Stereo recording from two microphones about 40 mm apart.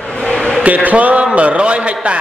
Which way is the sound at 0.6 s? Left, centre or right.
Right.